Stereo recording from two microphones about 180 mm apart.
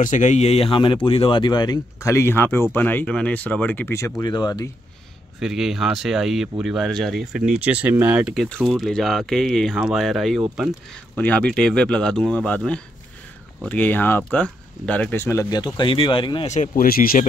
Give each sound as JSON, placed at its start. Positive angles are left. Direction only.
{"t": 0.0, "sound": "speech", "side_deg": 45}
{"t": 4.2, "sound": "speech", "side_deg": 25}
{"t": 5.4, "sound": "speech", "side_deg": 0}
{"t": 16.4, "sound": "speech", "side_deg": 45}